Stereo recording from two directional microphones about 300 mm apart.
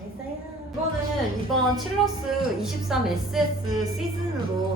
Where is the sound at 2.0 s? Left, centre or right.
Centre.